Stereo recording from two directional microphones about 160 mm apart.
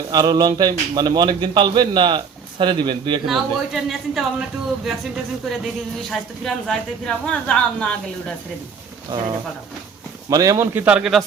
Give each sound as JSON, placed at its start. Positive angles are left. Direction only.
{"t": 0.1, "sound": "a man's voice", "side_deg": -25}
{"t": 3.2, "sound": "a woman's voice", "side_deg": 0}
{"t": 10.2, "sound": "a man's voice", "side_deg": -20}